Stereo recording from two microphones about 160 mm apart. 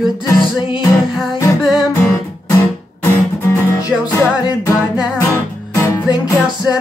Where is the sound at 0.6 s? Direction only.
30° left (ahead or behind).